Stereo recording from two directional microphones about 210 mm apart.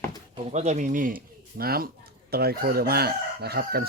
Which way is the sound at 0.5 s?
35° right (ahead or behind).